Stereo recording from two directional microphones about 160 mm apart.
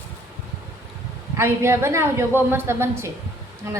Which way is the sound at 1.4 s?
15° right (ahead or behind).